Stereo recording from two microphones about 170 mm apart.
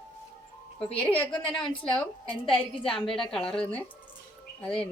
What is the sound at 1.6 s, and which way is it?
Speech, 30° left (ahead or behind).